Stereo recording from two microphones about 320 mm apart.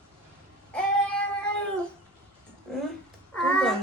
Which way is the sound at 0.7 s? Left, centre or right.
Centre.